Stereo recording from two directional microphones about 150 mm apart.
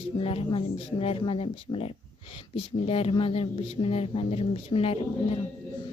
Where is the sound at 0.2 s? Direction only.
40° left (ahead or behind).